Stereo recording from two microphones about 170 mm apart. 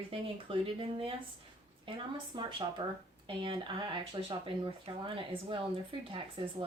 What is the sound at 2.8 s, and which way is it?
Speech, 35° right (ahead or behind).